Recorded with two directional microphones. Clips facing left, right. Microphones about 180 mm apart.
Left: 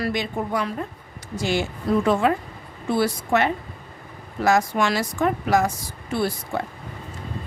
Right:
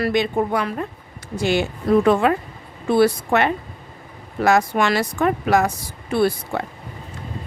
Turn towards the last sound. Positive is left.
turn(degrees=-65)  # may be behind; listen again after turning